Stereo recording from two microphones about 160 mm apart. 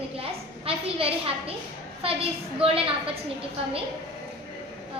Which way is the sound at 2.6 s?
35° right (ahead or behind).